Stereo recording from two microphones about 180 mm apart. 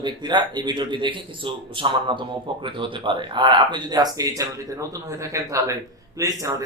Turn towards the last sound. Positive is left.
turn(degrees=-20)  # may be behind; listen again after turning